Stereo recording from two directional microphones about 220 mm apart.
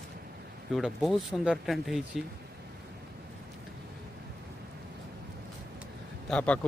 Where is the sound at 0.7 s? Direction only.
Centre (ahead or behind).